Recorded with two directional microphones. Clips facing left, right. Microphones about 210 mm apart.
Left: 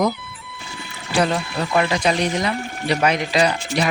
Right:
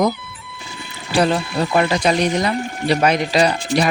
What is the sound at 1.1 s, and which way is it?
Speech, 35° right (ahead or behind).